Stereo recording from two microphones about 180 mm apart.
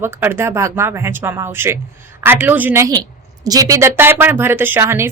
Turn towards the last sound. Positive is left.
turn(degrees=-15)  # may be behind; listen again after turning